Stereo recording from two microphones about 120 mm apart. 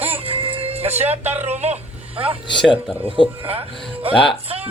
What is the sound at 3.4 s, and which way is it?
Speech, 55° right (ahead or behind).